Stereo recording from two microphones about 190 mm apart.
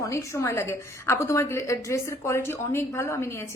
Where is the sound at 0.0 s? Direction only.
15° left (ahead or behind).